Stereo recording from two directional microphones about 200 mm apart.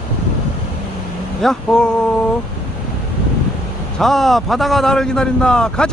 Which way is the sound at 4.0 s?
Centre (ahead or behind).